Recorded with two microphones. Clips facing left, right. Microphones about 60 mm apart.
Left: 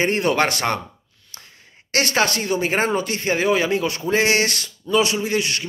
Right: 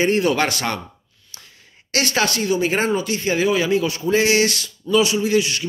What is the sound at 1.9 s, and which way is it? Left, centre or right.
Speech, left.